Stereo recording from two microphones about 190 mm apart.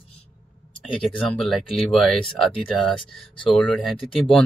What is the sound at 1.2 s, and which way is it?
Speech, centre (ahead or behind).